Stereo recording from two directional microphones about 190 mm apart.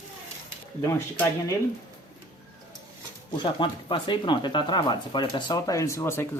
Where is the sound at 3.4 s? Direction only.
25° left (ahead or behind).